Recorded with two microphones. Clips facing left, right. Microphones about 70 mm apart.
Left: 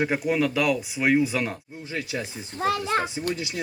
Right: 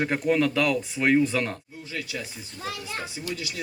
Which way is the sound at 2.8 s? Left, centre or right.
Left.